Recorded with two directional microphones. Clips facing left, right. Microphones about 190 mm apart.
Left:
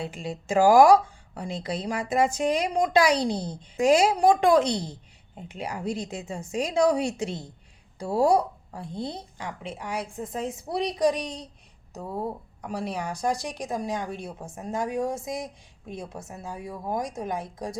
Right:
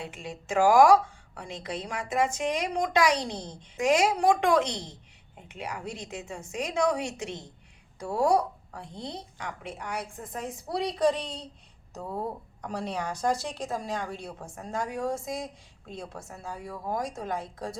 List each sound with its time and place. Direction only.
0.0 s a woman's voice: 35° left (ahead or behind); by 17.7 s 20° left (ahead or behind)